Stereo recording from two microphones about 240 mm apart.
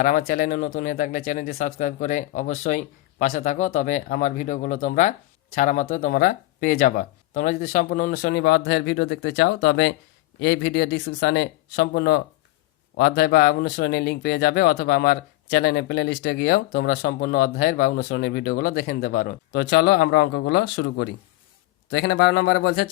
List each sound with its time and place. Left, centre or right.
0.0 s speech: left